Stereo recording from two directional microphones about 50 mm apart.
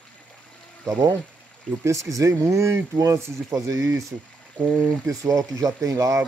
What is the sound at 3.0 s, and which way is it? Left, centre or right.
Speech, right.